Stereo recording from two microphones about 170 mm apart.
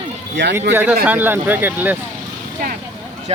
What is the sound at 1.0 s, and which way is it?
Speech, 10° right (ahead or behind).